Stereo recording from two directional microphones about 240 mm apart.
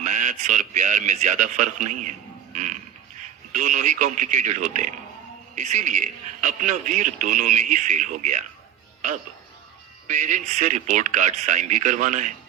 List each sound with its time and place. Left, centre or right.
0.0 s a sound: right
0.7 s a man's voice: right
10.1 s a man's voice: right